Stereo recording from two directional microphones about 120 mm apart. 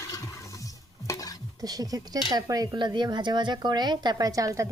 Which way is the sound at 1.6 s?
30° right (ahead or behind).